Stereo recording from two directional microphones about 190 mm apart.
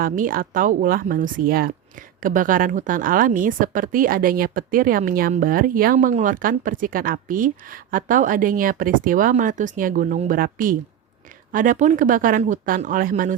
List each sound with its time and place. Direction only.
0.0 s speech: 50° right (ahead or behind)